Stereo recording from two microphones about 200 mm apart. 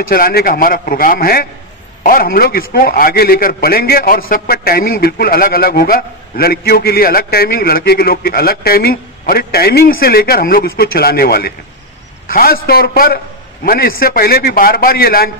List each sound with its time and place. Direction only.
0.1 s a man's voice: 50° left (ahead or behind)